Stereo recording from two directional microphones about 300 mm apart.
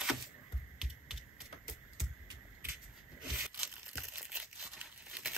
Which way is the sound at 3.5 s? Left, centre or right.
Centre.